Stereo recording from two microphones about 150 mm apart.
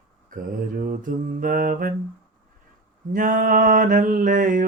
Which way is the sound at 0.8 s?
65° right (ahead or behind).